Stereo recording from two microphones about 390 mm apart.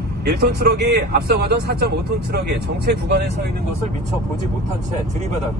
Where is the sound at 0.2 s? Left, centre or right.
Right.